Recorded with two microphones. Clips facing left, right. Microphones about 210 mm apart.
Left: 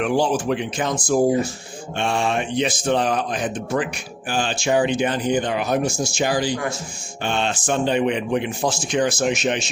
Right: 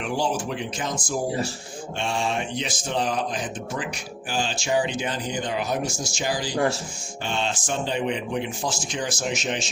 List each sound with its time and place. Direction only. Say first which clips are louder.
0.0 s a man's voice: left 6 dB; 60° left (ahead or behind)